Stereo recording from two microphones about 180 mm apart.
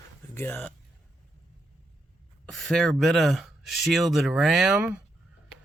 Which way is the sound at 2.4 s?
Centre (ahead or behind).